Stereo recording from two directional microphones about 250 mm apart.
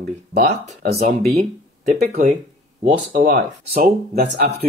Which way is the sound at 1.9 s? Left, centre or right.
Right.